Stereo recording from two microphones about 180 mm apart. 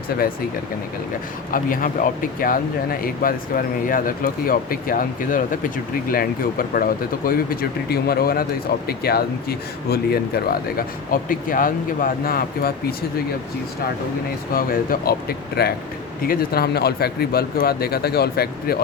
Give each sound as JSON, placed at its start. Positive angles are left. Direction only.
{"t": 1.5, "sound": "speech", "side_deg": 50}
{"t": 14.5, "sound": "speech", "side_deg": 55}